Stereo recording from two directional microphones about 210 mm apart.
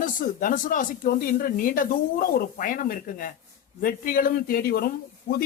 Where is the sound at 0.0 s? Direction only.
40° left (ahead or behind).